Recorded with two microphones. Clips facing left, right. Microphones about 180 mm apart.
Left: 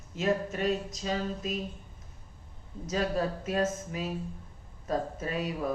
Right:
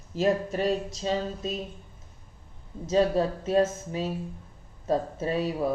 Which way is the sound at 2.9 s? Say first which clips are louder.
Right 6 dB; 30° right (ahead or behind).